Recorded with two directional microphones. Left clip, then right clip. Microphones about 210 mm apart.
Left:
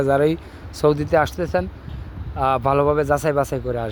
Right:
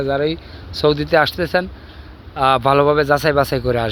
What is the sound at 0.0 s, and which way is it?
Speech, 15° left (ahead or behind).